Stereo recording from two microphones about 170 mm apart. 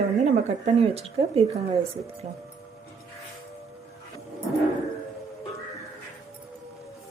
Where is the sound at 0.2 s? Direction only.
40° right (ahead or behind).